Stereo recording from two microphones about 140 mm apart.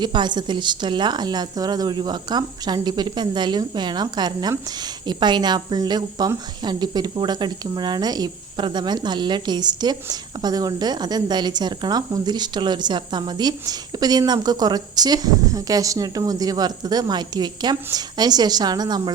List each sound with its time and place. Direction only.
0.0 s a woman's voice: 30° right (ahead or behind)